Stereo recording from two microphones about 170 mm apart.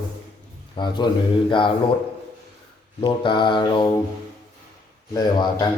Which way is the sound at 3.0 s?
30° left (ahead or behind).